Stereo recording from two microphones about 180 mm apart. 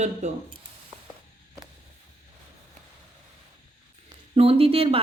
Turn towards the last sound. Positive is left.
turn(degrees=-30)  # may be behind; listen again after turning